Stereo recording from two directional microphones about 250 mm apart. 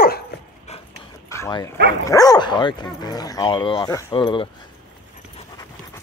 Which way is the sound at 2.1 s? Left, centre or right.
Centre.